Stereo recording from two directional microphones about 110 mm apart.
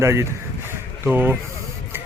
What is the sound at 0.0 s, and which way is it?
Speech, 25° right (ahead or behind).